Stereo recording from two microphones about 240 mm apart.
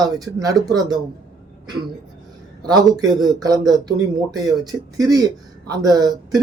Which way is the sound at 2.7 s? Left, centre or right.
Centre.